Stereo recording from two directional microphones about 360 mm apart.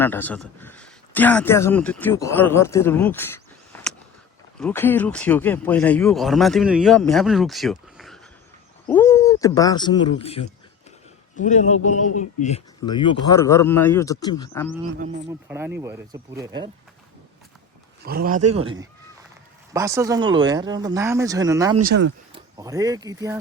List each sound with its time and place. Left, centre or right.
0.0 s speech: centre
3.7 s vehicle: centre
4.6 s a man's voice: centre
15.3 s speech: centre
18.0 s speech: right